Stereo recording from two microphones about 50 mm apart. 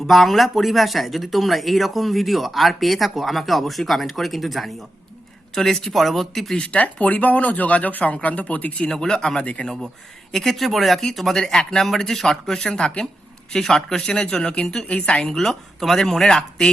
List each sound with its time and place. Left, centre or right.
0.0 s speech: centre
6.7 s speech: left
9.4 s speech: left
10.3 s speech: centre; by 15.3 s left
15.3 s speech: centre